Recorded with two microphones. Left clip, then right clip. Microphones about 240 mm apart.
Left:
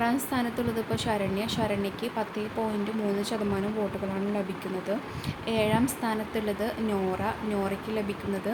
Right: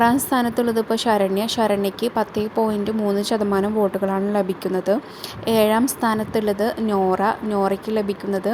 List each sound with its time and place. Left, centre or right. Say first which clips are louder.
0.0 s a woman's voice: right 10 dB; right